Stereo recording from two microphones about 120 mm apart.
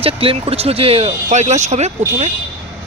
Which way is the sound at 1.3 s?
75° right (ahead or behind).